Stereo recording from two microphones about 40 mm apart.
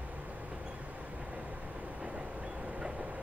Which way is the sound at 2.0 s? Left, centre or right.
Right.